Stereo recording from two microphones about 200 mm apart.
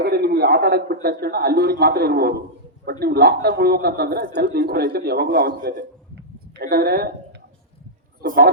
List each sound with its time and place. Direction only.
0.0 s speech: 50° right (ahead or behind)
8.2 s speech: 45° right (ahead or behind)